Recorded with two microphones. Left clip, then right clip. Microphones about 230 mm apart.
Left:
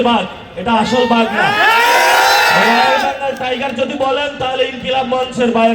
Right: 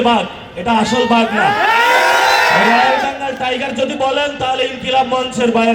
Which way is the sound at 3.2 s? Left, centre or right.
Right.